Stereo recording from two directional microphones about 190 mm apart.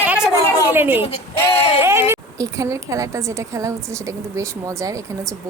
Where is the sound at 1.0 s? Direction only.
30° left (ahead or behind).